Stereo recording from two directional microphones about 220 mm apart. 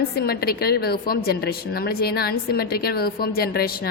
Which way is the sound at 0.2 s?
45° left (ahead or behind).